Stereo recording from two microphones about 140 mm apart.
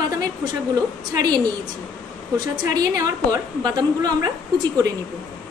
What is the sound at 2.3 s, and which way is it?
A woman's voice, 25° right (ahead or behind).